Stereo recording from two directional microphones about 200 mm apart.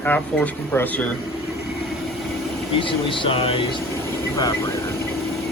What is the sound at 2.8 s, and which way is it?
Speech, 25° left (ahead or behind).